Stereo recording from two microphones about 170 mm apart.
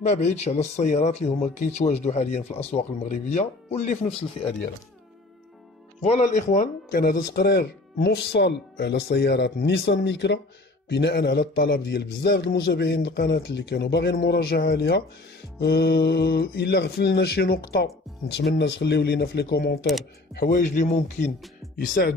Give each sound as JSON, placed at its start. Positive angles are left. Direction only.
{"t": 0.0, "sound": "speech", "side_deg": 40}
{"t": 6.0, "sound": "speech", "side_deg": 45}
{"t": 10.9, "sound": "speech", "side_deg": 75}
{"t": 18.3, "sound": "speech", "side_deg": 85}
{"t": 20.3, "sound": "a man's voice", "side_deg": 55}